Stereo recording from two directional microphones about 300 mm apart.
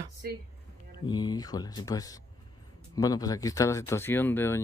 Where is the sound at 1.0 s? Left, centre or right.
Centre.